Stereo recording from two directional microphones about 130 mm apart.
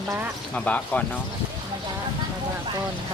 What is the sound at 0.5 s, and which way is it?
Speech, 10° left (ahead or behind).